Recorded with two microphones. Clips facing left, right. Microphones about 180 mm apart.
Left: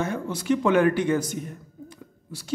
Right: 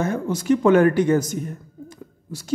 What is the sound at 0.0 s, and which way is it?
A man's voice, 45° right (ahead or behind).